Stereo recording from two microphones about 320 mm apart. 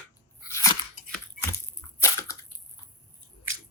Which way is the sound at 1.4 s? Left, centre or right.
Centre.